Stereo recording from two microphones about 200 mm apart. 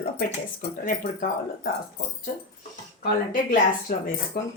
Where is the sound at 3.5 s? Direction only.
45° left (ahead or behind).